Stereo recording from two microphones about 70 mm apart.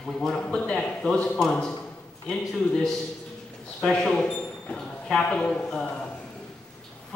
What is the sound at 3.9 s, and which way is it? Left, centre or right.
Speech, centre.